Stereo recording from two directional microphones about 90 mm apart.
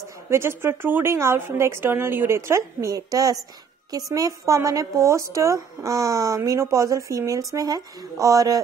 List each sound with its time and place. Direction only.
0.3 s a woman's voice: 30° right (ahead or behind)